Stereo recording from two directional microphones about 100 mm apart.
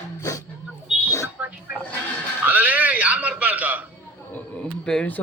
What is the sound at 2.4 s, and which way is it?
Music, 15° right (ahead or behind).